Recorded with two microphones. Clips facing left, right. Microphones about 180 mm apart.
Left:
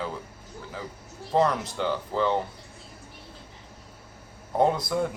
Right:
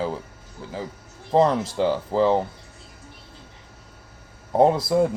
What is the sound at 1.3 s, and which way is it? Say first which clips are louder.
Speech: right 5 dB; 30° right (ahead or behind).